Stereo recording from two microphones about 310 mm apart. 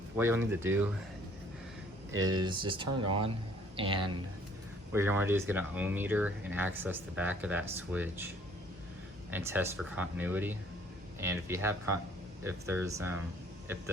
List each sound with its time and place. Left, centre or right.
0.2 s speech: centre
2.1 s speech: centre
9.3 s speech: centre